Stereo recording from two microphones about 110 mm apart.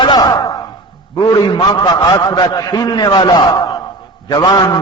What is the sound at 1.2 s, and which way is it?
A man's voice, 40° left (ahead or behind).